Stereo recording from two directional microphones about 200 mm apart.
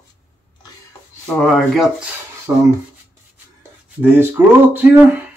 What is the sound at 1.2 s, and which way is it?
Speech, centre (ahead or behind).